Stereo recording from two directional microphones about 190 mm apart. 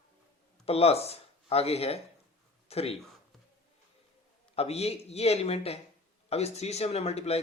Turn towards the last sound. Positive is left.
turn(degrees=35)  # may be behind; listen again after turning